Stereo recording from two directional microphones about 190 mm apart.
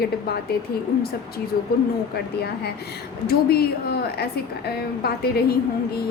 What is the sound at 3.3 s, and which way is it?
A woman's voice, 55° left (ahead or behind).